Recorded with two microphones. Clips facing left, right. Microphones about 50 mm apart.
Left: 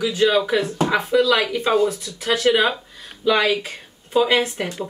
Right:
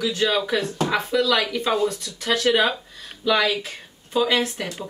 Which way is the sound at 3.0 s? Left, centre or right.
Centre.